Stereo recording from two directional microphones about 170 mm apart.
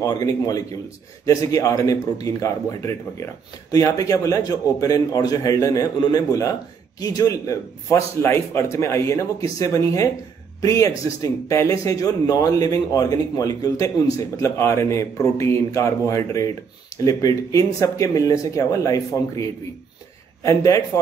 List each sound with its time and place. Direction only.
0.0 s speech: 20° left (ahead or behind)